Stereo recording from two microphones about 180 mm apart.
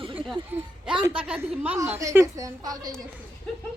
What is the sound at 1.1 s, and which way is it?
A woman's voice, 5° right (ahead or behind).